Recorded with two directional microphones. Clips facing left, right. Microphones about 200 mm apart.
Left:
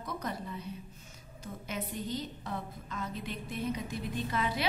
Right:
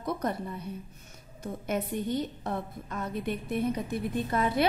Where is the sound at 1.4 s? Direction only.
55° right (ahead or behind).